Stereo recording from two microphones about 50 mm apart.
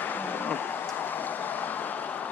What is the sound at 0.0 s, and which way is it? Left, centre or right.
Vehicle, left.